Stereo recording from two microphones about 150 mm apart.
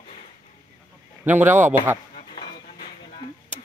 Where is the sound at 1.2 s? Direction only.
10° right (ahead or behind).